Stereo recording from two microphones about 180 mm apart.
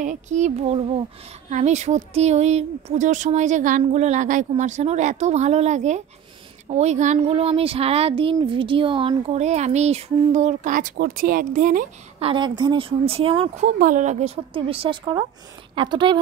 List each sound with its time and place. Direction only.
0.0 s speech: 45° right (ahead or behind)
12.2 s speech: 30° right (ahead or behind)
13.7 s speech: 45° right (ahead or behind); by 16.2 s 25° right (ahead or behind)